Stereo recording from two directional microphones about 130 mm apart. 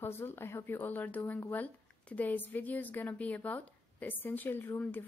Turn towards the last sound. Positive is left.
turn(degrees=15)  # may be behind; listen again after turning